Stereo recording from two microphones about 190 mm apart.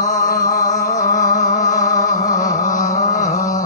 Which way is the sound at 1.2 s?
20° left (ahead or behind).